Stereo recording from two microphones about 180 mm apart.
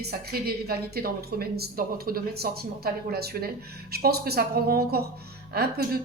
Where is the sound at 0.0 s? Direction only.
60° right (ahead or behind).